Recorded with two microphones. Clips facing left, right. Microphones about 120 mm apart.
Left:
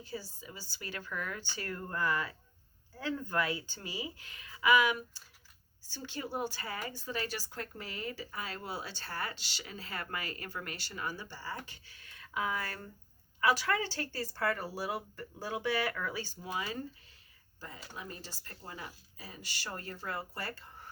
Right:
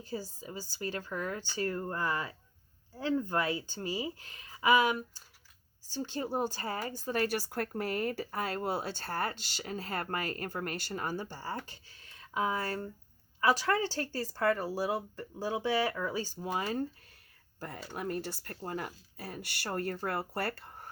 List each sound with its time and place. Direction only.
0.0 s speech: 40° right (ahead or behind)
17.9 s speech: 60° right (ahead or behind)